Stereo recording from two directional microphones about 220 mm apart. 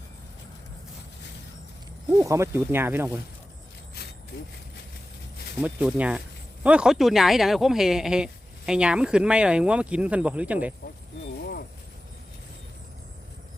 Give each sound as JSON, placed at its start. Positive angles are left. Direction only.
{"t": 2.0, "sound": "speech", "side_deg": -15}
{"t": 5.6, "sound": "speech", "side_deg": -5}